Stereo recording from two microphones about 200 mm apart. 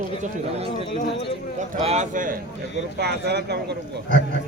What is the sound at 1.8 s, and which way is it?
Speech, 35° right (ahead or behind).